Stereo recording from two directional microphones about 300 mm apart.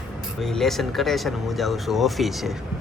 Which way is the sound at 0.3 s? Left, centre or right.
Centre.